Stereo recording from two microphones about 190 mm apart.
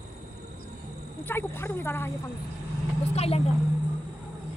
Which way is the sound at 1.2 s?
10° left (ahead or behind).